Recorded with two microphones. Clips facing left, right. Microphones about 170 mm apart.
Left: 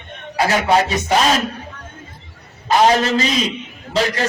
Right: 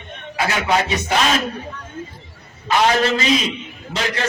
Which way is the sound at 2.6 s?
35° left (ahead or behind).